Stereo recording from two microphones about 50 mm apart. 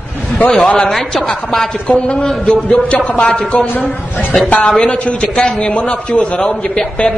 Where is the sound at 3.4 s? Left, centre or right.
Left.